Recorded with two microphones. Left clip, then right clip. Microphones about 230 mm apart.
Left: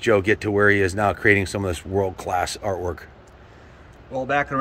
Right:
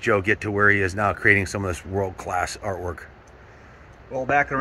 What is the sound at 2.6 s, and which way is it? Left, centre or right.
Speech, centre.